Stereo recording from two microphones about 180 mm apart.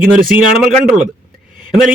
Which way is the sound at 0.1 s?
50° right (ahead or behind).